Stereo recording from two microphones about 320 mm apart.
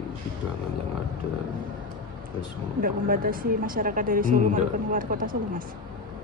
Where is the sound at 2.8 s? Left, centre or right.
Right.